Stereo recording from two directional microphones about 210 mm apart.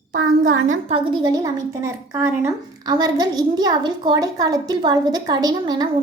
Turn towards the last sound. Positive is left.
turn(degrees=-20)  # may be behind; listen again after turning